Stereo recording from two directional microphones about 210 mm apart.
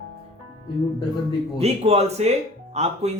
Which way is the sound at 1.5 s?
30° right (ahead or behind).